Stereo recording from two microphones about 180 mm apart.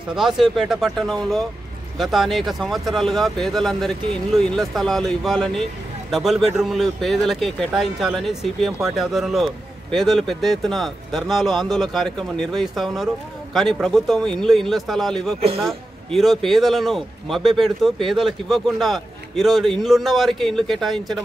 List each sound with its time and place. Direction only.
0.1 s speech: centre (ahead or behind)